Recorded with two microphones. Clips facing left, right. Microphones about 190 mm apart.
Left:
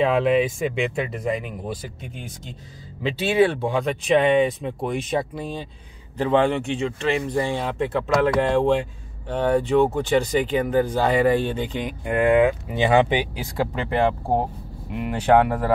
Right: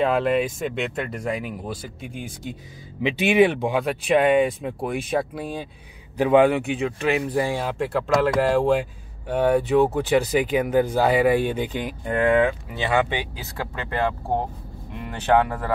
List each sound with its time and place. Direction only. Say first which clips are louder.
0.0 s speech: left 2 dB; centre (ahead or behind)
3.0 s speech: right 1 dB; 15° right (ahead or behind)
12.0 s speech: left 2 dB; 5° left (ahead or behind)
12.7 s speech: left 7 dB; 20° left (ahead or behind)